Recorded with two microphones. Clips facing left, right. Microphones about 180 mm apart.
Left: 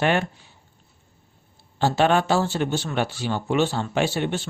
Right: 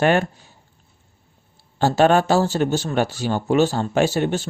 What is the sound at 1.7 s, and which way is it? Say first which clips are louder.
Speech: right 4 dB; 45° right (ahead or behind).